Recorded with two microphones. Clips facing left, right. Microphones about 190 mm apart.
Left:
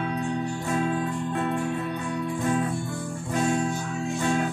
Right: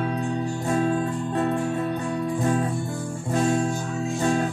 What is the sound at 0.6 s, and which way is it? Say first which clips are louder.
Music: right 4 dB; 40° right (ahead or behind).